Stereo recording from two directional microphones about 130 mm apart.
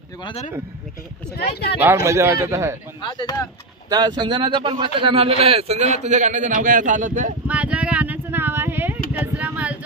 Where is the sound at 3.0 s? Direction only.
35° left (ahead or behind).